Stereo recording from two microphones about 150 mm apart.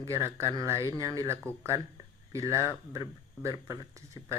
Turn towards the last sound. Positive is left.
turn(degrees=-25)  # may be behind; listen again after turning